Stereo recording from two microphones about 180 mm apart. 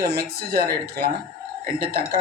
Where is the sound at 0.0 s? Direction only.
60° right (ahead or behind).